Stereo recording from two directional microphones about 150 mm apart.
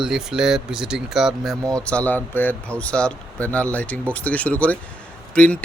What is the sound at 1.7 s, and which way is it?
Speech, 10° left (ahead or behind).